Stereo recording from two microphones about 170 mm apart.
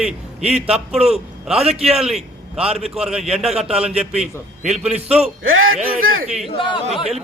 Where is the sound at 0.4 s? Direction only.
40° right (ahead or behind).